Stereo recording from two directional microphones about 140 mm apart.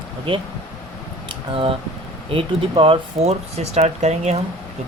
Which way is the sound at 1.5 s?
40° right (ahead or behind).